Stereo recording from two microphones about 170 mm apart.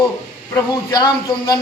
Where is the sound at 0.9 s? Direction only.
25° left (ahead or behind).